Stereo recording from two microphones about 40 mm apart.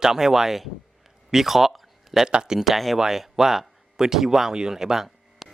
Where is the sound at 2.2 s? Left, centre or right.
Centre.